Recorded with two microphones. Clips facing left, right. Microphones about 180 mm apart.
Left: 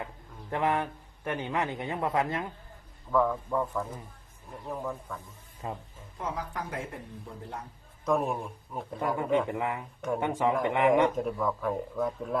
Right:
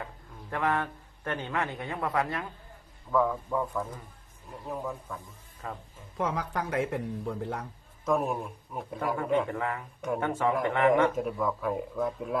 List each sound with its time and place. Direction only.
0.5 s a man's voice: 20° left (ahead or behind)
3.1 s speech: centre (ahead or behind)
5.6 s a man's voice: 20° left (ahead or behind)
6.1 s speech: 80° right
8.0 s speech: centre (ahead or behind)
9.1 s speech: 10° left (ahead or behind)
11.1 s speech: 5° right (ahead or behind)